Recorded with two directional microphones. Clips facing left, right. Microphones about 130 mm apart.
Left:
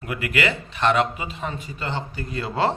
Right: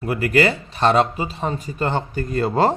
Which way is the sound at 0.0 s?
35° right (ahead or behind).